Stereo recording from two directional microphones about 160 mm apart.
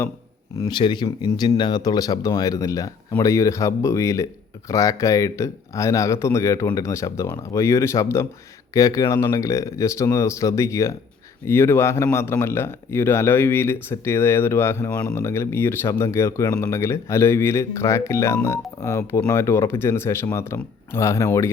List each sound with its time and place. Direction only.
0.5 s speech: 25° left (ahead or behind)